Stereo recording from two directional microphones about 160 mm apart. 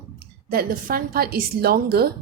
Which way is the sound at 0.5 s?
65° right (ahead or behind).